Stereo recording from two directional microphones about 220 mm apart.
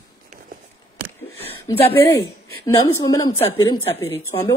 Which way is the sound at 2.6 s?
15° left (ahead or behind).